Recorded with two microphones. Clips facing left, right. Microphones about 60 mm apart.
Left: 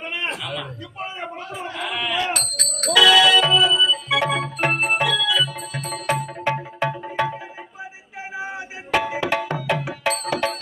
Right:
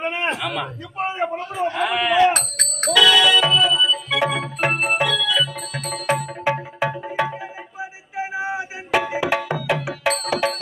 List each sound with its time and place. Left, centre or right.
0.0 s a sound: right
0.4 s a man's voice: right
2.3 s speech: right
2.9 s music: centre